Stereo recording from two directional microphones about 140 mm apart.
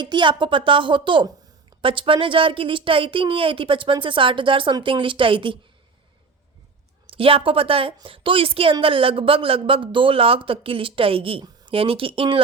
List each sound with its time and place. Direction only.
0.0 s a woman's voice: 35° right (ahead or behind)
7.1 s a woman's voice: 40° right (ahead or behind)